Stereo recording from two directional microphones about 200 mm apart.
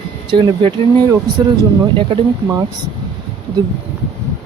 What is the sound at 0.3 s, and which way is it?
Speech, 25° right (ahead or behind).